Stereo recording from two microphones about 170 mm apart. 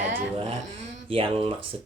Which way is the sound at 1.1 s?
30° right (ahead or behind).